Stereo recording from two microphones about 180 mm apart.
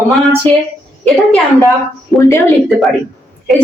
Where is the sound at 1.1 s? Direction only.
Centre (ahead or behind).